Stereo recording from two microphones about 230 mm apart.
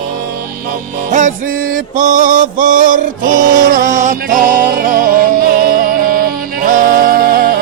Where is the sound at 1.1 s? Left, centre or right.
Right.